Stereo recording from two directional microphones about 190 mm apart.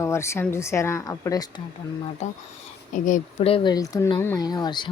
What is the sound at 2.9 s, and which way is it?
Speech, 45° left (ahead or behind).